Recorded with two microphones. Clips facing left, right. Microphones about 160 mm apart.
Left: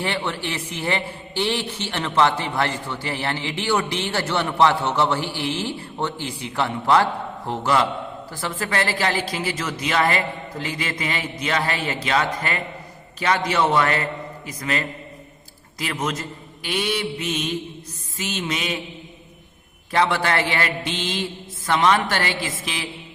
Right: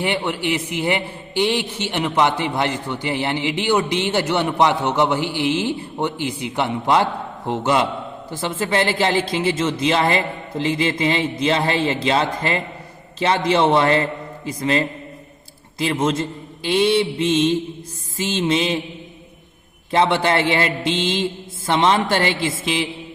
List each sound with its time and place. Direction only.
0.0 s a man's voice: 15° right (ahead or behind)
19.9 s a woman's voice: 25° right (ahead or behind)